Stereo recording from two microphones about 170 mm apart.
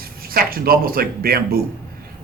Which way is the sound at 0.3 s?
60° right (ahead or behind).